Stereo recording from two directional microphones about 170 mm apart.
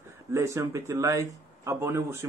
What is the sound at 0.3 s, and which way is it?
A man's voice, 15° right (ahead or behind).